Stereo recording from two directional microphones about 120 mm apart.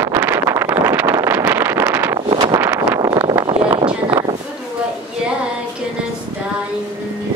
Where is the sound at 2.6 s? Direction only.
25° right (ahead or behind).